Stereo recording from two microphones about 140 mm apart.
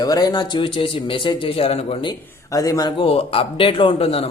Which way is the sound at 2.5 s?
25° left (ahead or behind).